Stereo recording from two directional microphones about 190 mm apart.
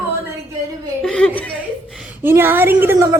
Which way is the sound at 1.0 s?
5° left (ahead or behind).